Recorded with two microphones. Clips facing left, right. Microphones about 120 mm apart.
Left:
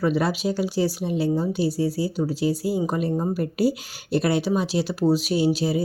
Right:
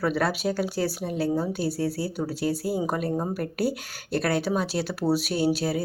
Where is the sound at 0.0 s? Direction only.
Centre (ahead or behind).